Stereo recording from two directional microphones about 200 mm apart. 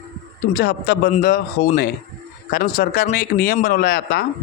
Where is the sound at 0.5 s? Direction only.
55° left (ahead or behind).